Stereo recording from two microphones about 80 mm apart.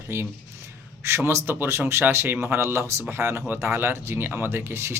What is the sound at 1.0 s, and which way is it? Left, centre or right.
Speech, right.